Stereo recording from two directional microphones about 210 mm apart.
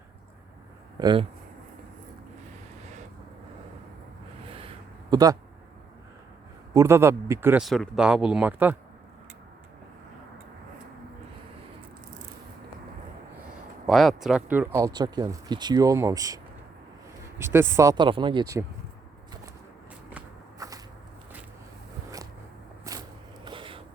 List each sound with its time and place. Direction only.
0.9 s speech: 20° right (ahead or behind)
5.1 s speech: 15° right (ahead or behind)
6.7 s speech: 10° right (ahead or behind)
13.8 s speech: centre (ahead or behind); by 18.6 s 20° right (ahead or behind)
20.1 s walk: 10° right (ahead or behind)
22.8 s a sound: 15° right (ahead or behind)